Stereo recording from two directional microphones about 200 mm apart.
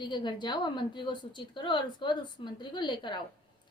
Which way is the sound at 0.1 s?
20° left (ahead or behind).